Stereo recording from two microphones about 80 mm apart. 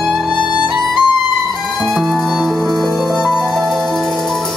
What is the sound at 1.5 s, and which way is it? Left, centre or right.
Music, centre.